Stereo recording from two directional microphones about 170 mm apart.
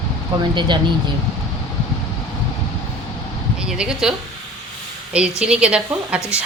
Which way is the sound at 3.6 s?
5° right (ahead or behind).